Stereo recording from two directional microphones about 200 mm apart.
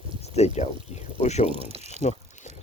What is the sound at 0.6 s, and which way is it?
Speech, 35° left (ahead or behind).